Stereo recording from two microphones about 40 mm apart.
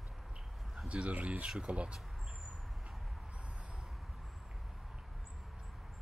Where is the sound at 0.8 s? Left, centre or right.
Right.